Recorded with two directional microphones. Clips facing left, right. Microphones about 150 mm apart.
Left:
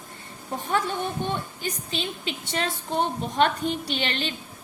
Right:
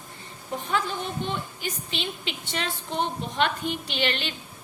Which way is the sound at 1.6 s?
40° left (ahead or behind).